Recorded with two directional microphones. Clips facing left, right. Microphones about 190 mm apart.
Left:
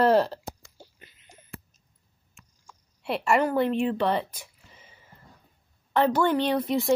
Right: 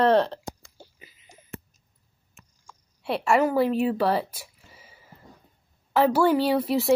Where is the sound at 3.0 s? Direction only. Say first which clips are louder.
Right 2 dB; centre (ahead or behind).